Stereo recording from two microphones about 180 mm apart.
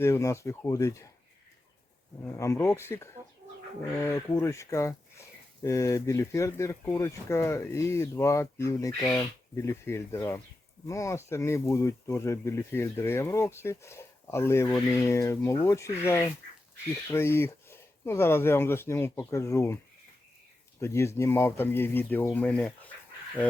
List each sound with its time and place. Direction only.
0.0 s speech: 15° left (ahead or behind)
2.2 s speech: 15° left (ahead or behind)
20.8 s speech: 15° left (ahead or behind)